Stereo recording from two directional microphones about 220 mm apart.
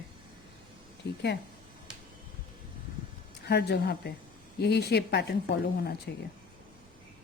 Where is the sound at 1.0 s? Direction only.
50° left (ahead or behind).